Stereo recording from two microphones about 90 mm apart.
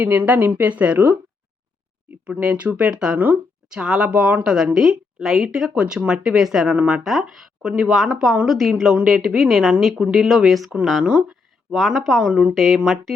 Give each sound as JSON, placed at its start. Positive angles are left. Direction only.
{"t": 0.0, "sound": "speech", "side_deg": -20}
{"t": 6.7, "sound": "speech", "side_deg": -15}
{"t": 7.0, "sound": "speech", "side_deg": 0}
{"t": 11.7, "sound": "speech", "side_deg": 0}